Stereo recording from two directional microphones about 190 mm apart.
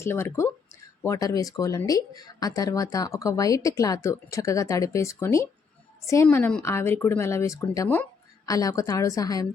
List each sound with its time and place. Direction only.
0.0 s a woman's voice: 10° left (ahead or behind)